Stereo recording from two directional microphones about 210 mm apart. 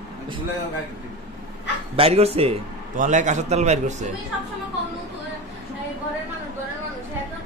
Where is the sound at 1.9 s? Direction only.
30° right (ahead or behind).